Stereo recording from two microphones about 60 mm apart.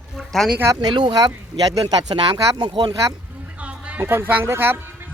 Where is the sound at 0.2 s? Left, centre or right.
Centre.